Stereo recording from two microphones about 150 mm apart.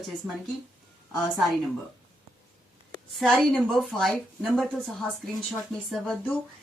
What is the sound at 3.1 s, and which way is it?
A woman's voice, centre (ahead or behind).